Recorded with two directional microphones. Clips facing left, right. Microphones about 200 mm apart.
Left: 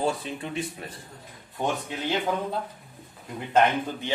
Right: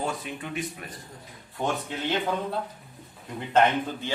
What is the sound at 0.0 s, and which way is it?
Speech, 30° left (ahead or behind).